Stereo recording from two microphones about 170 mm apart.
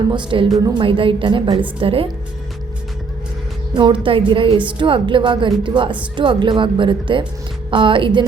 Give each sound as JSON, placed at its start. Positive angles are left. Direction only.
{"t": 0.1, "sound": "a woman's voice", "side_deg": -30}
{"t": 3.8, "sound": "a woman's voice", "side_deg": -30}